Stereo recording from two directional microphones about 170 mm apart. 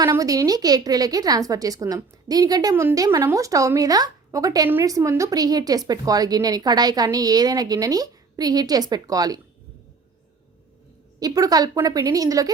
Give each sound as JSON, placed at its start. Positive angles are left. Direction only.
{"t": 0.1, "sound": "a woman's voice", "side_deg": -20}
{"t": 11.2, "sound": "a woman's voice", "side_deg": -20}